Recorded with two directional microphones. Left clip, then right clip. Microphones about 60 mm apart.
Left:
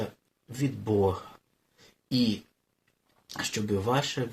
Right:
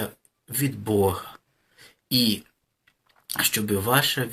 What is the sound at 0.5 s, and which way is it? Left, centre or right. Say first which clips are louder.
Speech: right 4 dB; left.